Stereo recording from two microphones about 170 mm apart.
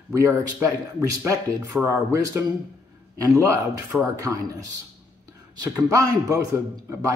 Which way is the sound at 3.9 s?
Centre (ahead or behind).